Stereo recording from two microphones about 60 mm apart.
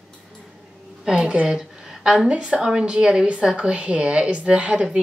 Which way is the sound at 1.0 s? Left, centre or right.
Centre.